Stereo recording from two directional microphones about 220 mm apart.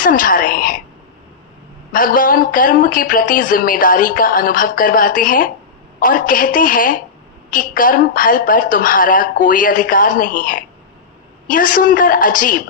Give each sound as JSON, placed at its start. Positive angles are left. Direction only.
{"t": 0.0, "sound": "whispering", "side_deg": 40}
{"t": 1.9, "sound": "speech", "side_deg": 40}